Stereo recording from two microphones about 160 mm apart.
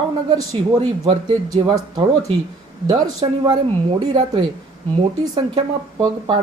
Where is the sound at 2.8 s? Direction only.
25° right (ahead or behind).